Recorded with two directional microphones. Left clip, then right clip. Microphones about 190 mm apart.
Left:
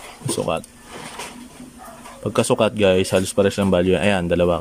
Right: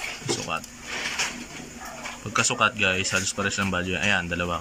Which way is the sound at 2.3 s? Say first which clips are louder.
Left 4 dB; 45° left (ahead or behind).